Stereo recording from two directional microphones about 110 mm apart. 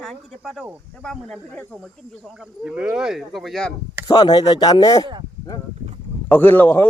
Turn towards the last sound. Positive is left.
turn(degrees=20)  # may be behind; listen again after turning